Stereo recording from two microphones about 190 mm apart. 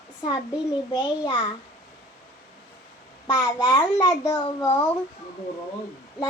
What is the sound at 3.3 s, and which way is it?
A child's voice, 20° left (ahead or behind).